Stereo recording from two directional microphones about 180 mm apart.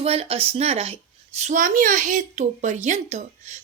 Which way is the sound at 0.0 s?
35° right (ahead or behind).